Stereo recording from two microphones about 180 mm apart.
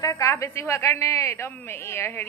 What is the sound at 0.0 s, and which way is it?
A woman's voice, 20° left (ahead or behind).